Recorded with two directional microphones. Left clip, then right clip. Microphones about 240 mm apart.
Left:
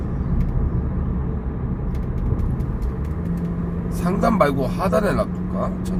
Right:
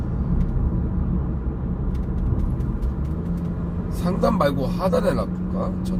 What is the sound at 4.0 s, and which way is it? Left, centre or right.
Vehicle, centre.